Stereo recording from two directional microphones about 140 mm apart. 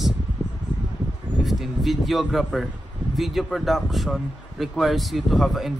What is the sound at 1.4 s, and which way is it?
A man's voice, centre (ahead or behind).